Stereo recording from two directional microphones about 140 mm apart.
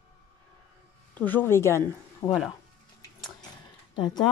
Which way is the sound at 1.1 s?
10° left (ahead or behind).